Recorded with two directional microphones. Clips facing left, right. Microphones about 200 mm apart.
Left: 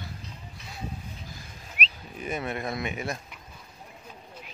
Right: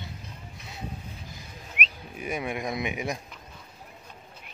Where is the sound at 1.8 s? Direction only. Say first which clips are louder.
Even; 35° left (ahead or behind).